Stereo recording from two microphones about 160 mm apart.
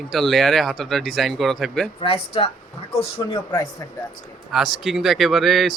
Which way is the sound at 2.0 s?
35° left (ahead or behind).